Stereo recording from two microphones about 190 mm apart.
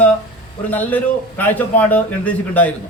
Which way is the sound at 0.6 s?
10° left (ahead or behind).